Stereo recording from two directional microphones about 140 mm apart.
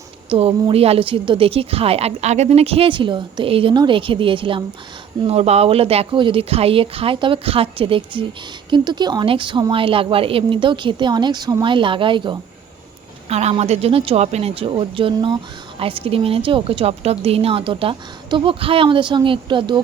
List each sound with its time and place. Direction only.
0.3 s a woman's voice: 45° right (ahead or behind)
13.2 s a woman's voice: 50° right (ahead or behind)